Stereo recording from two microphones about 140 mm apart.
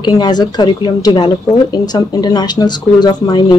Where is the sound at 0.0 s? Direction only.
30° left (ahead or behind).